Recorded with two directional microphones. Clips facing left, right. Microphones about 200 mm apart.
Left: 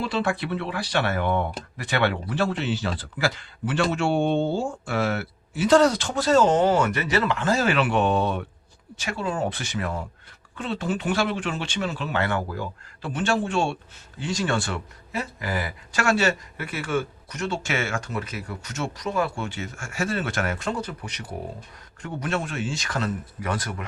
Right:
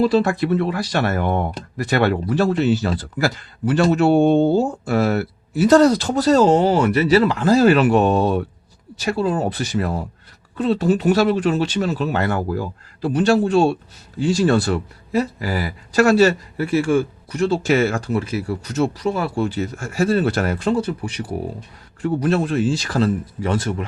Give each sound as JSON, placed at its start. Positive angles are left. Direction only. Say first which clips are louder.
{"t": 0.0, "sound": "speech", "louder": "right 9 dB", "side_deg": -40}